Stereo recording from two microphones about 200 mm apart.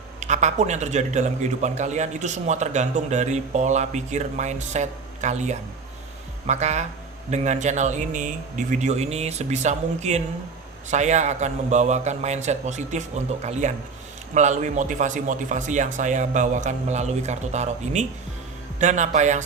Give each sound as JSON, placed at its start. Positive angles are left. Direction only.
{"t": 0.2, "sound": "a man's voice", "side_deg": -35}